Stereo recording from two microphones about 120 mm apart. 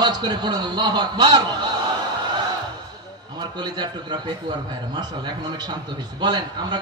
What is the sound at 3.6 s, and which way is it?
A man's voice, 35° right (ahead or behind).